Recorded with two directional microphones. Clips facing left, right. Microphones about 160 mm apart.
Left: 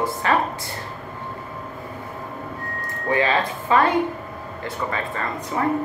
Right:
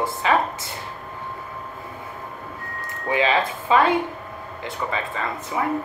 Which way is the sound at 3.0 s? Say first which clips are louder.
Even; 15° right (ahead or behind).